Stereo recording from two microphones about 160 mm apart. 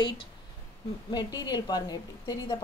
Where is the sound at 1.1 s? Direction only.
25° left (ahead or behind).